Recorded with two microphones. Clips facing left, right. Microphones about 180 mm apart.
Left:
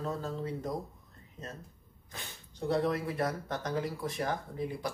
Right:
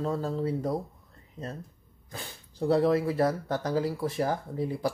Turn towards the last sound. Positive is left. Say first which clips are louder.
# right 6 dB
turn(degrees=-30)  # may be behind; listen again after turning